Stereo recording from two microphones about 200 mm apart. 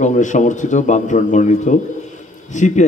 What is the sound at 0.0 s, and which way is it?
Speech, 40° left (ahead or behind).